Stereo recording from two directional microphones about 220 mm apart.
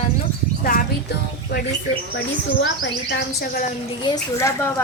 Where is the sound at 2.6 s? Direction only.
50° left (ahead or behind).